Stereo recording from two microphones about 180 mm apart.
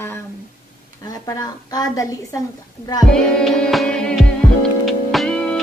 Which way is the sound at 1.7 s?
20° left (ahead or behind).